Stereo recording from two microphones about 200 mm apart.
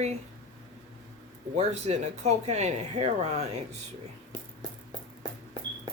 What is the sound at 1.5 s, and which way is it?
Speech, 35° right (ahead or behind).